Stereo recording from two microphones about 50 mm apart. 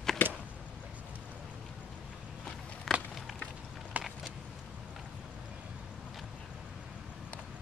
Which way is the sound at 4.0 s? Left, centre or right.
Right.